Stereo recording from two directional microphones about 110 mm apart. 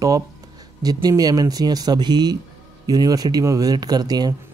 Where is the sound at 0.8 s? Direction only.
35° right (ahead or behind).